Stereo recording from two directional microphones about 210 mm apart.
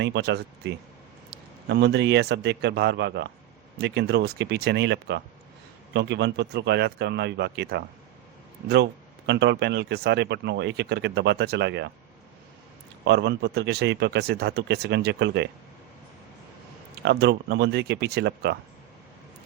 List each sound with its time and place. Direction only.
0.0 s speech: 55° right (ahead or behind)
13.1 s speech: 55° right (ahead or behind)
17.0 s speech: 55° right (ahead or behind)